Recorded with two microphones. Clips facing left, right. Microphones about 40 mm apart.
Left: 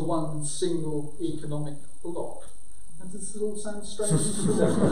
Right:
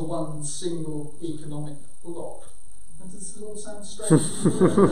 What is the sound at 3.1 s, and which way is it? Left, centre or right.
Speech, centre.